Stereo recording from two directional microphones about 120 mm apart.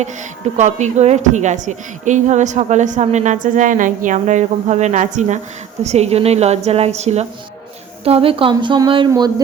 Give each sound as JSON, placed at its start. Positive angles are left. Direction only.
{"t": 0.5, "sound": "a woman's voice", "side_deg": -75}
{"t": 5.8, "sound": "speech", "side_deg": -65}
{"t": 8.0, "sound": "a woman's voice", "side_deg": -50}